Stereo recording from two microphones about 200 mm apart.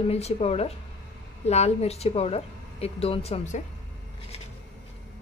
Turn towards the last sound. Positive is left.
turn(degrees=30)  # may be behind; listen again after turning